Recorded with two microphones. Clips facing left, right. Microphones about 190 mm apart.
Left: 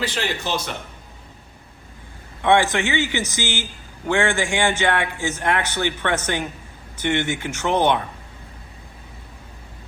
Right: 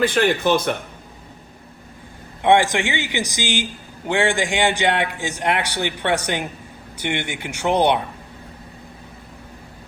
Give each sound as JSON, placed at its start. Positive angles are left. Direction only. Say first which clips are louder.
{"t": 0.0, "sound": "speech", "louder": "right 8 dB", "side_deg": -55}
{"t": 2.4, "sound": "a man's voice", "louder": "right 2 dB", "side_deg": -15}